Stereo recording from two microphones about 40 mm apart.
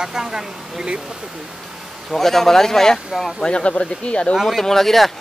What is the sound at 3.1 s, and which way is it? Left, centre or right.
Speech, centre.